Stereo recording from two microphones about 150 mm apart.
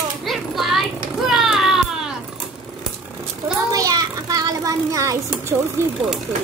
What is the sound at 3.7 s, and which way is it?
Child singing, 25° right (ahead or behind).